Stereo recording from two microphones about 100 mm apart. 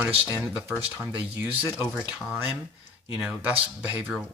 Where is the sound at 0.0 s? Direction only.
20° right (ahead or behind).